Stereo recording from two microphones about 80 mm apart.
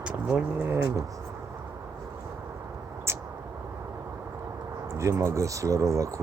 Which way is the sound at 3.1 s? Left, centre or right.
Right.